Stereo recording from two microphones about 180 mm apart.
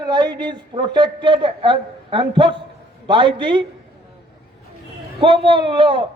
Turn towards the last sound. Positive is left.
turn(degrees=-25)  # may be behind; listen again after turning